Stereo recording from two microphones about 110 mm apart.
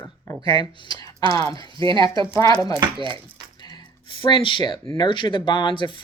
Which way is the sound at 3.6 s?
40° left (ahead or behind).